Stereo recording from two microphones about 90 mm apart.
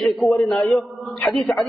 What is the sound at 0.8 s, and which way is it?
Speech, 15° left (ahead or behind).